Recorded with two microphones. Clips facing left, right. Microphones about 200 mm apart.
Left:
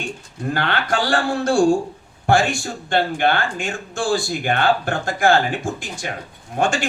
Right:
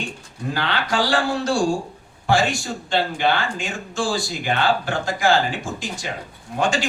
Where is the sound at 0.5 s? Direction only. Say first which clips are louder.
Left 1 dB; 55° left (ahead or behind).